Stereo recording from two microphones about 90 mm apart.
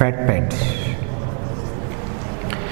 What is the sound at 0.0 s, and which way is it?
Speech, 15° right (ahead or behind).